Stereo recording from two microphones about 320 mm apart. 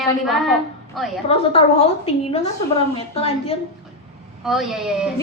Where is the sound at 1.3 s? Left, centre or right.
Centre.